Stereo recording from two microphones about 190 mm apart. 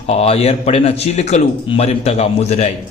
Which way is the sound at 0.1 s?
35° left (ahead or behind).